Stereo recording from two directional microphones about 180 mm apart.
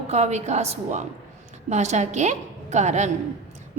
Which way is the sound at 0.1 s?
40° right (ahead or behind).